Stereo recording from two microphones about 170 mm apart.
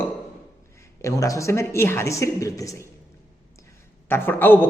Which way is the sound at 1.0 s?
20° left (ahead or behind).